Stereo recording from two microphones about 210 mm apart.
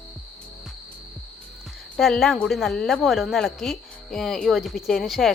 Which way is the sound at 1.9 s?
Centre (ahead or behind).